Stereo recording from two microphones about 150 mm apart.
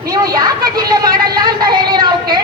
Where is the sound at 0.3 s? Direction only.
25° right (ahead or behind).